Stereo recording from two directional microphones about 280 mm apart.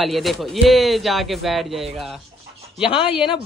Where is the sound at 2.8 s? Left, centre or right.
Centre.